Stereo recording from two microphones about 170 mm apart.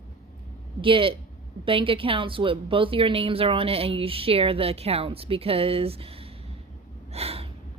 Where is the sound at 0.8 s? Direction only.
30° right (ahead or behind).